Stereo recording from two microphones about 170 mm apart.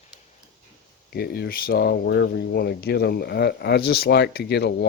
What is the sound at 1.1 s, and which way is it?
Speech, 70° left (ahead or behind).